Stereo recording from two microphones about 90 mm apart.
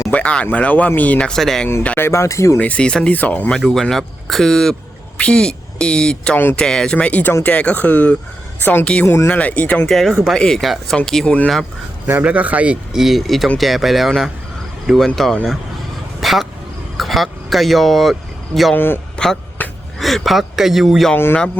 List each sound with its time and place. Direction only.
0.1 s speech: 10° left (ahead or behind)
1.3 s speech: 5° left (ahead or behind)
2.0 s speech: 30° left (ahead or behind)
2.6 s speech: 15° left (ahead or behind)
9.0 s speech: 30° left (ahead or behind)
9.3 s speech: 15° left (ahead or behind)
9.9 s speech: 5° left (ahead or behind)
12.2 s speech: 15° right (ahead or behind); by 15.4 s 5° left (ahead or behind)
16.2 s vehicle: centre (ahead or behind)
17.0 s speech: centre (ahead or behind)
18.7 s a man's voice: 25° left (ahead or behind)
19.1 s a sound: 5° left (ahead or behind)
19.6 s a sound: 20° left (ahead or behind)
20.0 s speech: centre (ahead or behind)